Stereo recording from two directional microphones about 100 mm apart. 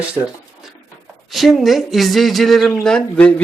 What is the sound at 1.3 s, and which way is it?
Speech, centre (ahead or behind).